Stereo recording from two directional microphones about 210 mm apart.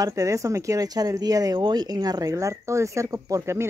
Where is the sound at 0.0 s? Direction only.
15° right (ahead or behind).